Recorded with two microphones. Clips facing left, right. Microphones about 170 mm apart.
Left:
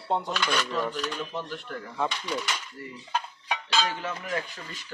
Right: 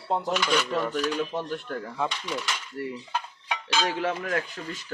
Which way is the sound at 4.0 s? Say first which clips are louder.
Right 7 dB; 80° right.